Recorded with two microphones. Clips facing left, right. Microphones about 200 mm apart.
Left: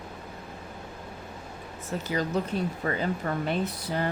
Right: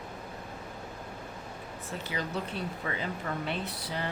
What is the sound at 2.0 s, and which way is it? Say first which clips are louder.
Speech: left 7 dB; 45° left (ahead or behind).